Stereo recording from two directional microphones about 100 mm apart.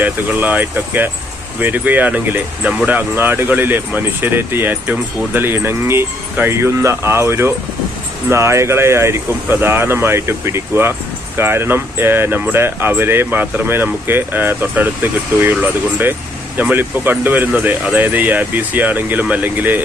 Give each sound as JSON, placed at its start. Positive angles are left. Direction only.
{"t": 0.0, "sound": "speech", "side_deg": -15}